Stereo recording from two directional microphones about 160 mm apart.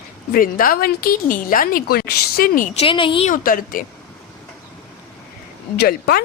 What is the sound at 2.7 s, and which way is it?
Speech, 35° left (ahead or behind).